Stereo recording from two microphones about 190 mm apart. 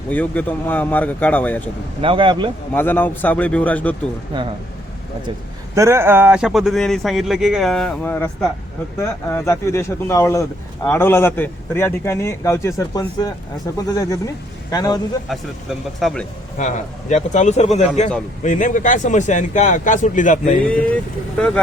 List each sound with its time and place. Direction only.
0.1 s a man's voice: 10° left (ahead or behind)
2.0 s speech: 25° right (ahead or behind)
2.7 s a man's voice: 10° left (ahead or behind)
5.7 s a man's voice: 15° right (ahead or behind); by 15.0 s 20° left (ahead or behind)
15.3 s a man's voice: centre (ahead or behind)
16.6 s a man's voice: 40° left (ahead or behind)
20.7 s a man's voice: 5° left (ahead or behind)